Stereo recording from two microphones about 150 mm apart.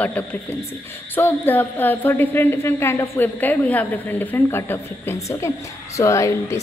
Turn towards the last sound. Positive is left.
turn(degrees=20)  # may be behind; listen again after turning